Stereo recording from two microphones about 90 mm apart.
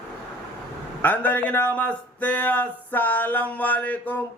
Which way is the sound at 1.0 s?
20° left (ahead or behind).